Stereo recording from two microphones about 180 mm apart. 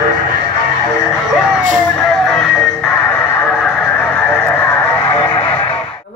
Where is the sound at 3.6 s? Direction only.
5° left (ahead or behind).